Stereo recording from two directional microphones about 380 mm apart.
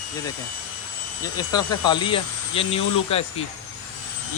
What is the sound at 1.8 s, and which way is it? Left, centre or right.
Speech, centre.